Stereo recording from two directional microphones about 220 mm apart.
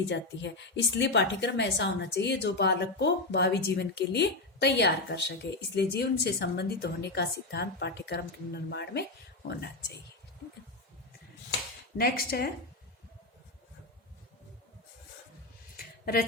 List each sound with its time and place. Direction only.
0.1 s a woman's voice: 50° left (ahead or behind)
11.9 s a woman's voice: 45° left (ahead or behind)